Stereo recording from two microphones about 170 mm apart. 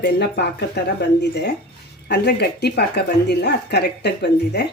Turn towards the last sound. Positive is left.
turn(degrees=80)